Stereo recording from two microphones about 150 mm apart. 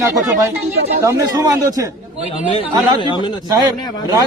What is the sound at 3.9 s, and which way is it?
Speech, 25° left (ahead or behind).